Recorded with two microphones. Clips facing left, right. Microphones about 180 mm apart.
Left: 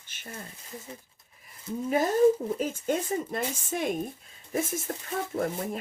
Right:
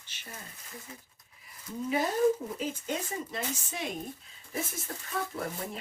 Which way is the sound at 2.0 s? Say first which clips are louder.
Left 5 dB; 50° left (ahead or behind).